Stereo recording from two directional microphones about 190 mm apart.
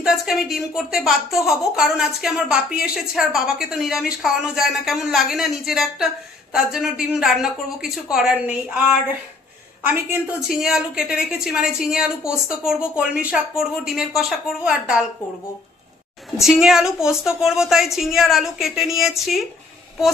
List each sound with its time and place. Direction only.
0.0 s a woman's voice: centre (ahead or behind)
9.8 s a woman's voice: 5° right (ahead or behind)
16.4 s a woman's voice: 5° right (ahead or behind)